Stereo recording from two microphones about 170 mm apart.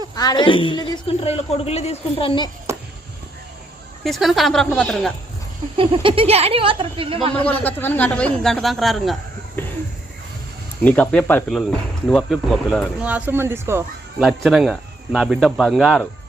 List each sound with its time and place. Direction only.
0.2 s a woman's voice: 25° left (ahead or behind)
2.7 s a sound: 15° right (ahead or behind)
4.0 s speech: centre (ahead or behind)
5.7 s speech: 30° right (ahead or behind)
7.3 s speech: 10° left (ahead or behind)
10.8 s speech: 10° left (ahead or behind)
13.0 s speech: 10° right (ahead or behind)
14.2 s speech: centre (ahead or behind)